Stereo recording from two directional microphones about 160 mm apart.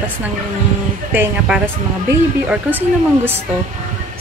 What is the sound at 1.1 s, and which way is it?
A woman's voice, 10° right (ahead or behind).